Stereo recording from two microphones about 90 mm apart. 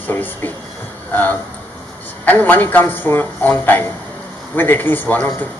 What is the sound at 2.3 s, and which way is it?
Speech, 20° left (ahead or behind).